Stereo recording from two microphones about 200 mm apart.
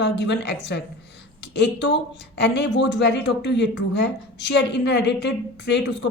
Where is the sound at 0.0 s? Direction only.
60° left (ahead or behind).